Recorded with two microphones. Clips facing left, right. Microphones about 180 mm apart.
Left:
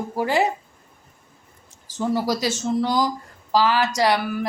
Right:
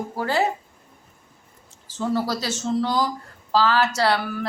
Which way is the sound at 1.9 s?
15° left (ahead or behind).